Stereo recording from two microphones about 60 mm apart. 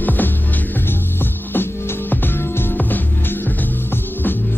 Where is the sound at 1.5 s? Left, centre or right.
Left.